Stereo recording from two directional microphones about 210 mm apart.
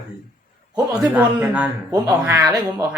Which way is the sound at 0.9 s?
5° right (ahead or behind).